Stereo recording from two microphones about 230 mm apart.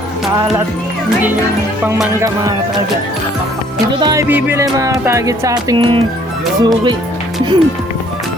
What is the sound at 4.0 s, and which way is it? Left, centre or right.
Music, centre.